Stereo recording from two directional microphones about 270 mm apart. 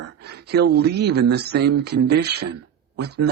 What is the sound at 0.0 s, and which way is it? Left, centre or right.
Speech, right.